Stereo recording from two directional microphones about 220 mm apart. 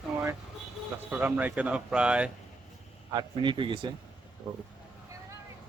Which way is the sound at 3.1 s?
20° right (ahead or behind).